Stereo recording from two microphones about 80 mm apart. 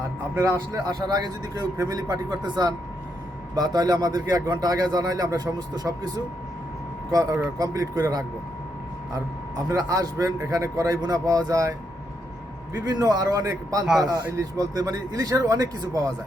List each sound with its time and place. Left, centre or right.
0.3 s speech: right
1.0 s a man's voice: right
12.7 s a man's voice: right